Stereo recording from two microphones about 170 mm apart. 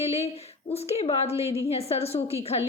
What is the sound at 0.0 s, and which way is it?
A woman's voice, 35° left (ahead or behind).